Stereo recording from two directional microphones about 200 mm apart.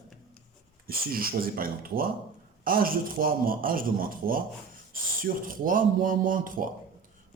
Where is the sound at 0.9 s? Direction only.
45° right (ahead or behind).